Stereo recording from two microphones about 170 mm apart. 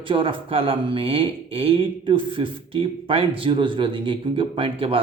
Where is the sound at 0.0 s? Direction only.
30° right (ahead or behind).